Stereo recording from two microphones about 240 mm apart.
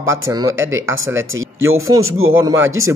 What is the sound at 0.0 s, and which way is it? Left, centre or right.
Speech, centre.